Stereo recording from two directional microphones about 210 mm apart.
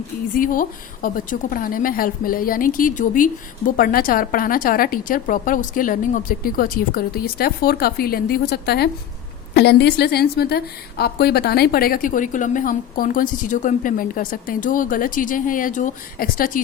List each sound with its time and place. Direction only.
0.3 s a woman's voice: 40° left (ahead or behind)